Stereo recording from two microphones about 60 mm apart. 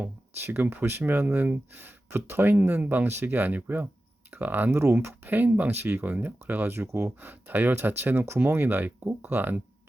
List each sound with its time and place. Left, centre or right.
0.4 s speech: right
2.1 s speech: right
2.5 s speech: right